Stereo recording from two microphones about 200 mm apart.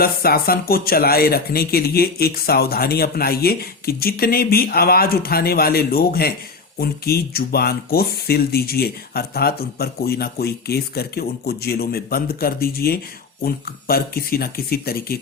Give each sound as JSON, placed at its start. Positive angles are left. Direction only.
{"t": 0.0, "sound": "speech", "side_deg": 50}